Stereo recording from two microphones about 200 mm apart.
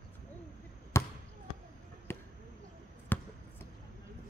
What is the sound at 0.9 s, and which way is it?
Basketball bounce, 15° left (ahead or behind).